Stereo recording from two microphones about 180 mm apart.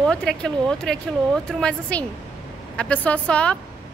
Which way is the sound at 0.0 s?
5° left (ahead or behind).